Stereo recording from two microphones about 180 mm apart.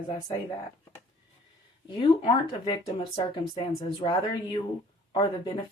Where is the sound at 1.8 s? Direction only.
30° left (ahead or behind).